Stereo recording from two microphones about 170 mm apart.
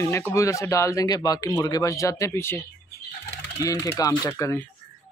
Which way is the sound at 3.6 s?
20° left (ahead or behind).